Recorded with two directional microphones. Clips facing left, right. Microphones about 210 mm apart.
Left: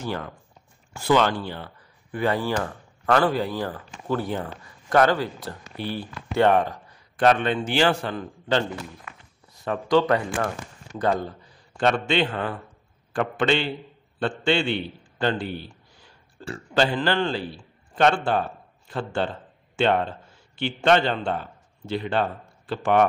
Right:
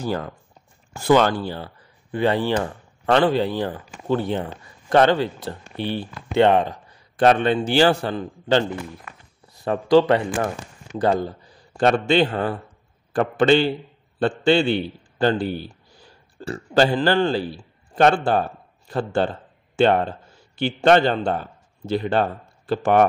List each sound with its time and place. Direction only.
0.0 s a man's voice: 35° right (ahead or behind)
7.2 s a man's voice: 30° right (ahead or behind)
11.7 s a man's voice: 40° right (ahead or behind)